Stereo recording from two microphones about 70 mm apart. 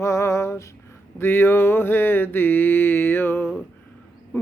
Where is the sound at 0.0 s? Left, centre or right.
Left.